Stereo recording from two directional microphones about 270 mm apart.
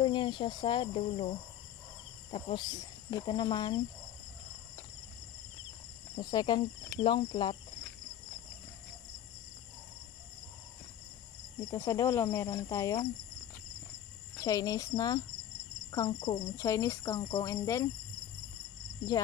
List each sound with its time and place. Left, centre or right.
0.0 s speech: centre
2.3 s speech: centre
6.1 s speech: centre
11.7 s speech: centre
14.4 s speech: centre